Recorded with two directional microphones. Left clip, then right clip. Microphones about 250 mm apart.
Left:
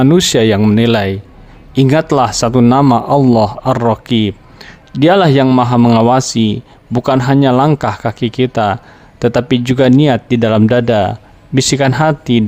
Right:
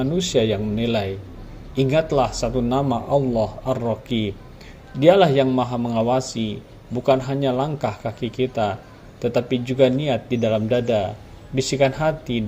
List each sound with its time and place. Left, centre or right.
0.0 s speech: left